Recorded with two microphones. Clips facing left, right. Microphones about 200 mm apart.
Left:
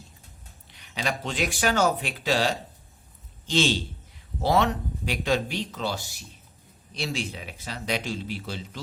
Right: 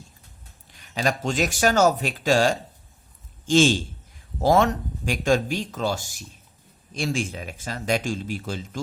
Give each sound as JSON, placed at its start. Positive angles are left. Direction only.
{"t": 0.7, "sound": "a man's voice", "side_deg": -45}